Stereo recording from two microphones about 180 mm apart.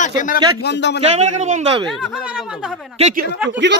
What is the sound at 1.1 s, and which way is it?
Speech, 40° right (ahead or behind).